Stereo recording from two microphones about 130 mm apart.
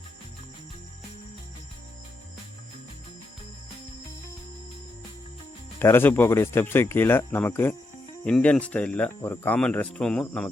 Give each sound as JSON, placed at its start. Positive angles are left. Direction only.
{"t": 5.8, "sound": "speech", "side_deg": 15}